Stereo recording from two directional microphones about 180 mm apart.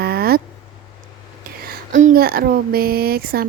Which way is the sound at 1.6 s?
45° right (ahead or behind).